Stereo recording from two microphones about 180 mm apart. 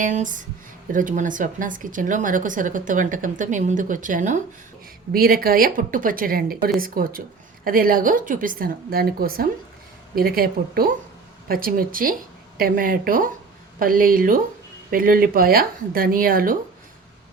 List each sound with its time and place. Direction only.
0.0 s speech: 45° right (ahead or behind)
5.1 s speech: 55° right (ahead or behind)